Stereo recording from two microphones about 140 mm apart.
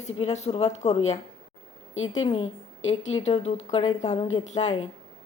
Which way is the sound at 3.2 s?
50° left (ahead or behind).